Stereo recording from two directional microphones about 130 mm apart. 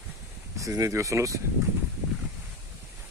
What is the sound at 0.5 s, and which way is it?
Speech, 25° right (ahead or behind).